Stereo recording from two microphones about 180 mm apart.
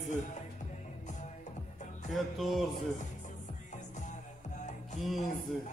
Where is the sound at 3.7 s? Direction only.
40° left (ahead or behind).